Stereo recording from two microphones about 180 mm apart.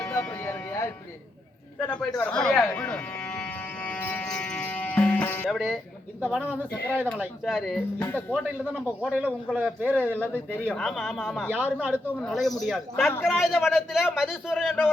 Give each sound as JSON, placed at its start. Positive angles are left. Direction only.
{"t": 0.0, "sound": "music", "side_deg": 15}
{"t": 5.5, "sound": "a man's voice", "side_deg": 0}
{"t": 9.0, "sound": "a man's voice", "side_deg": -5}
{"t": 10.2, "sound": "speech", "side_deg": 10}
{"t": 11.6, "sound": "a man's voice", "side_deg": -10}
{"t": 12.0, "sound": "speech", "side_deg": 0}